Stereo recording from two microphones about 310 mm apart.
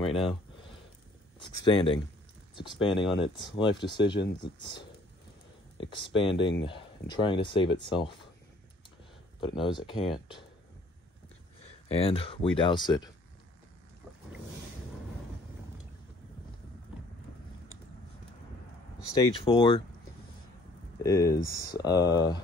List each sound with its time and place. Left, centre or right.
0.0 s a sound: centre
1.4 s speech: centre
9.4 s speech: centre
11.9 s speech: centre
19.1 s speech: centre
21.0 s speech: centre